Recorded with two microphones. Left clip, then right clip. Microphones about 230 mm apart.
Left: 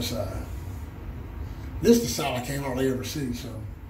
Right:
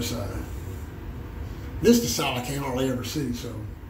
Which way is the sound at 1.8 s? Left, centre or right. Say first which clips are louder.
Right 1 dB; centre.